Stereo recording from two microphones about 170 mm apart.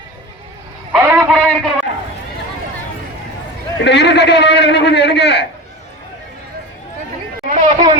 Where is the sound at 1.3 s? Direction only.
5° left (ahead or behind).